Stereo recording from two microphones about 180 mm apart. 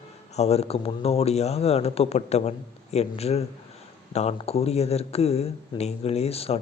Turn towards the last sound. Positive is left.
turn(degrees=35)  # may be behind; listen again after turning